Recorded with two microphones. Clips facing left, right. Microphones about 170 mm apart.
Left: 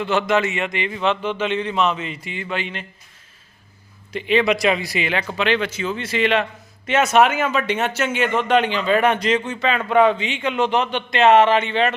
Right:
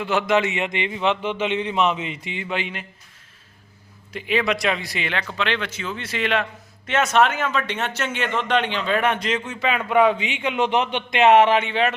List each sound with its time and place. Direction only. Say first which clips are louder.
0.0 s a man's voice: left 1 dB; 10° right (ahead or behind)
4.1 s a man's voice: left 4 dB; 5° right (ahead or behind)